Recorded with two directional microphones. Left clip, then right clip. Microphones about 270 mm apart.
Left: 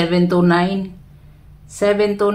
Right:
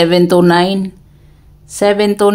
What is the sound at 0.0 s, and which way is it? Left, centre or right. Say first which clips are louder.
Speech: right 7 dB; right.